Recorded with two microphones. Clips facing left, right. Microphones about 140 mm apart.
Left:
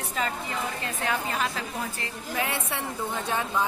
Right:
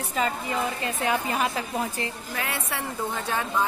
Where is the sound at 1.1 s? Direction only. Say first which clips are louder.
Right 3 dB; 15° right (ahead or behind).